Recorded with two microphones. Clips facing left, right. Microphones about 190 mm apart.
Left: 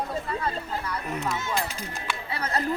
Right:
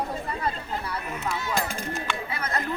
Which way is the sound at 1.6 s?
50° right (ahead or behind).